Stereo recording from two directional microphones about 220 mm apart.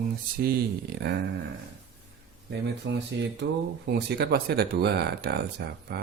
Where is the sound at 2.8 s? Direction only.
60° right (ahead or behind).